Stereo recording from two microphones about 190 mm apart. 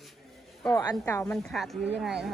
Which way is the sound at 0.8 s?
15° left (ahead or behind).